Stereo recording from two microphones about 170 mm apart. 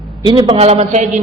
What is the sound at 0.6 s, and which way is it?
Speech, 40° right (ahead or behind).